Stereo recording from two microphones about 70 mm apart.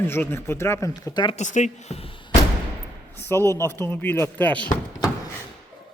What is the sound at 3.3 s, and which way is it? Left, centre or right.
A man's voice, left.